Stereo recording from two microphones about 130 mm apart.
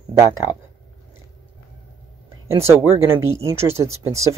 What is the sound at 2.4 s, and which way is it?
Speech, 20° right (ahead or behind).